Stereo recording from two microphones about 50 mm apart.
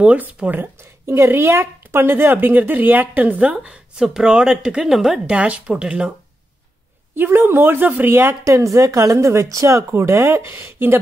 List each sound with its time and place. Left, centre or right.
0.0 s speech: right
0.6 s a woman's voice: right
2.3 s speech: right
3.6 s speech: right
4.0 s speech: centre
4.8 s speech: centre
5.3 s speech: right
7.2 s a woman's voice: right
8.5 s speech: right